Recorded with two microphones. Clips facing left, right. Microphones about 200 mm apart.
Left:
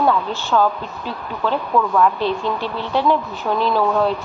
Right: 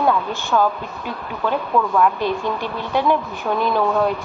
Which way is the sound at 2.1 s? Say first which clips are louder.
Left 1 dB; 15° right (ahead or behind).